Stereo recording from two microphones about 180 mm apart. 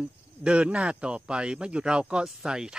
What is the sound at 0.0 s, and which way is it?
Speech, 5° right (ahead or behind).